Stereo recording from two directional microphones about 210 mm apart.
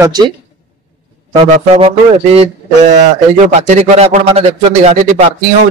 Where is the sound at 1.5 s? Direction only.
30° right (ahead or behind).